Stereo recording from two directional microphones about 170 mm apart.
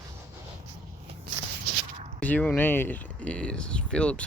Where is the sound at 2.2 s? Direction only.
10° left (ahead or behind).